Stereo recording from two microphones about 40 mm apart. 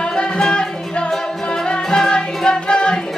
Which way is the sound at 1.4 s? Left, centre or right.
Left.